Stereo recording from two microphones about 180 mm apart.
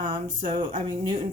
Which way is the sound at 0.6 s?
25° right (ahead or behind).